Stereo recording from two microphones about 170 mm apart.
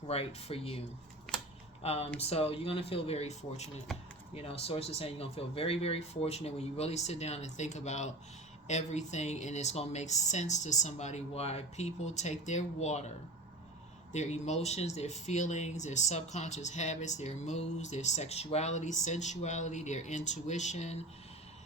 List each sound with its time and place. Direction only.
0.1 s speech: 35° left (ahead or behind)
1.8 s speech: 35° left (ahead or behind)
14.1 s speech: 40° left (ahead or behind)